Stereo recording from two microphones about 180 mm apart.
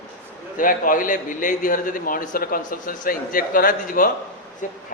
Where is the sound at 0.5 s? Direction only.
50° left (ahead or behind).